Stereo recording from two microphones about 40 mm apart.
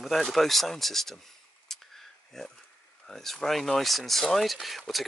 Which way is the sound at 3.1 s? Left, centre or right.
Centre.